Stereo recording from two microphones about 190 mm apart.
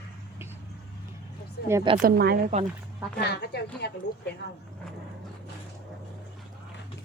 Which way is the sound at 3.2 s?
60° left (ahead or behind).